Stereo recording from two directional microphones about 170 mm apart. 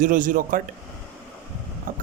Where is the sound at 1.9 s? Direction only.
50° right (ahead or behind).